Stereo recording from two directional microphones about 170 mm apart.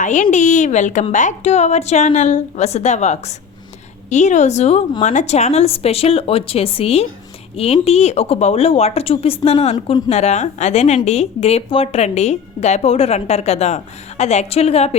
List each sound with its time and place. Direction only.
0.0 s a woman's voice: 45° left (ahead or behind)